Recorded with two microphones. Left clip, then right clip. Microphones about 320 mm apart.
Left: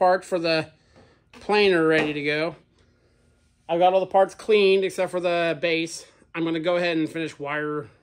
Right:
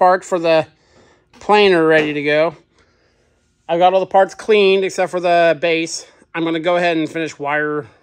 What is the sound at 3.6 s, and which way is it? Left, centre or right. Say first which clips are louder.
Speech: right 6 dB; right.